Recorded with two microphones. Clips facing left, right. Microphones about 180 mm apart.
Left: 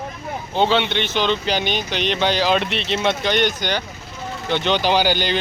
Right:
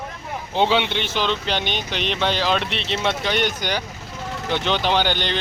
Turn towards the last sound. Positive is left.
turn(degrees=5)  # may be behind; listen again after turning